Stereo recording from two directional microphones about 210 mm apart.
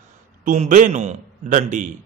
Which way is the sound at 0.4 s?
40° right (ahead or behind).